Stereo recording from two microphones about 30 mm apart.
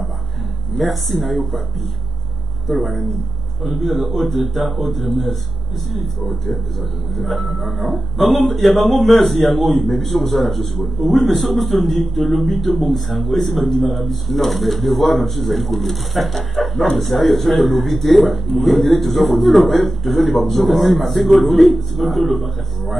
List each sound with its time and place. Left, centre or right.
0.7 s a man's voice: centre
2.7 s speech: centre
3.6 s a man's voice: centre